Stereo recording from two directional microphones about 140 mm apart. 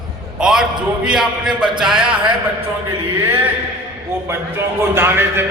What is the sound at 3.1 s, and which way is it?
A man's voice, 15° right (ahead or behind).